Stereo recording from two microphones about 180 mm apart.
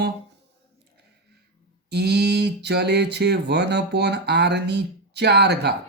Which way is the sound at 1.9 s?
65° right (ahead or behind).